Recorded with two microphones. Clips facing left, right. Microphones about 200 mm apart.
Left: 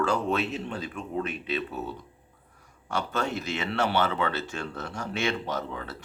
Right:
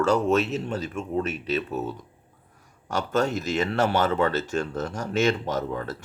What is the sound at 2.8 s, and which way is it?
Speech, 45° right (ahead or behind).